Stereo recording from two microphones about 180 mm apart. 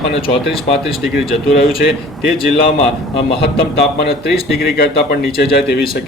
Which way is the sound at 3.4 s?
65° left (ahead or behind).